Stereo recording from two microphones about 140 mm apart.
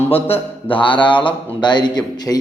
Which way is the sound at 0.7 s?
35° left (ahead or behind).